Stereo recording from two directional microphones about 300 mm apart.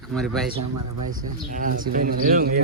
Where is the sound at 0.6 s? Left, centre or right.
Right.